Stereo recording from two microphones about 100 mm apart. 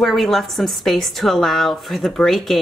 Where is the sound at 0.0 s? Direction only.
Centre (ahead or behind).